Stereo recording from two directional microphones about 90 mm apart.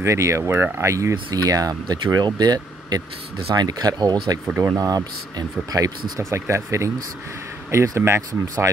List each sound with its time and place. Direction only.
0.0 s speech: 35° right (ahead or behind)
1.3 s speech: 45° right (ahead or behind)
4.6 s speech: 35° right (ahead or behind)